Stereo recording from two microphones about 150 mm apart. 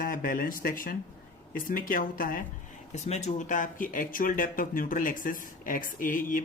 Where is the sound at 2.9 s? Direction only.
50° left (ahead or behind).